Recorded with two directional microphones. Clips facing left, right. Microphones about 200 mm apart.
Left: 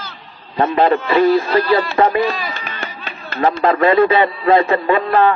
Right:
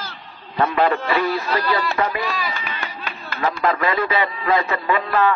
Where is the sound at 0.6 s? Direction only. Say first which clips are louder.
Left 4 dB; 30° left (ahead or behind).